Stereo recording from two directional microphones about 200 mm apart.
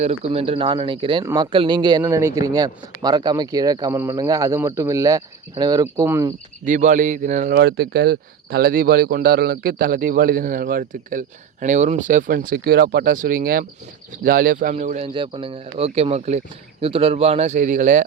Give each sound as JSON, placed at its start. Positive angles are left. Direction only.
{"t": 0.3, "sound": "speech", "side_deg": -30}
{"t": 6.7, "sound": "speech", "side_deg": -40}
{"t": 7.5, "sound": "speech", "side_deg": -50}
{"t": 15.0, "sound": "speech", "side_deg": -25}